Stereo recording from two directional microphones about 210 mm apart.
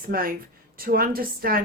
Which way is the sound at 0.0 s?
45° right (ahead or behind).